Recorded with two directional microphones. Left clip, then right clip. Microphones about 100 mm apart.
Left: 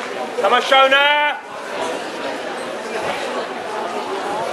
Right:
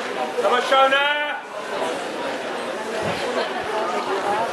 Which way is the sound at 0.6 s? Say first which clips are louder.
Left 5 dB; 25° left (ahead or behind).